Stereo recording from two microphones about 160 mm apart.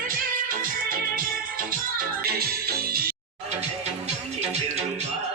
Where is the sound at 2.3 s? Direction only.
70° right (ahead or behind).